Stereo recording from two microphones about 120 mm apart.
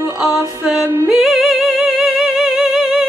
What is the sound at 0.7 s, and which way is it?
Music, 20° right (ahead or behind).